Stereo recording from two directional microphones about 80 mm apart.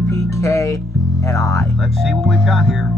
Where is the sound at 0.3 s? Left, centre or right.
Left.